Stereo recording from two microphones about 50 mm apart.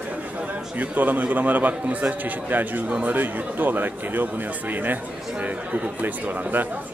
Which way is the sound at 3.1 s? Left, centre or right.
Right.